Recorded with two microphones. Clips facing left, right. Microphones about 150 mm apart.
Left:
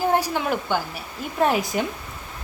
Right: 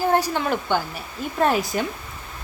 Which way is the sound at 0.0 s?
10° left (ahead or behind).